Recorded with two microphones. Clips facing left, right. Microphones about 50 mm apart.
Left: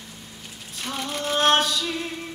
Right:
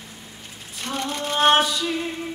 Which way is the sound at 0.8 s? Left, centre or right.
Centre.